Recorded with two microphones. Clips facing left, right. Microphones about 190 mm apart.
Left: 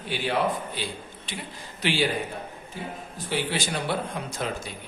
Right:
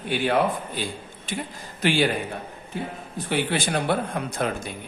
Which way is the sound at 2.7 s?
60° right (ahead or behind).